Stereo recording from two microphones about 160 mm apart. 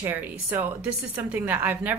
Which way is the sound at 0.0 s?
10° right (ahead or behind).